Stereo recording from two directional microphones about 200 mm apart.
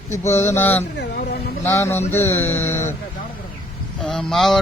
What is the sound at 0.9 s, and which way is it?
Speech, 55° left (ahead or behind).